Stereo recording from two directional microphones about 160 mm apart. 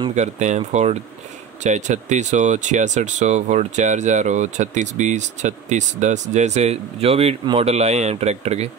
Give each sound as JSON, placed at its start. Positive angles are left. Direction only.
{"t": 0.1, "sound": "speech", "side_deg": -45}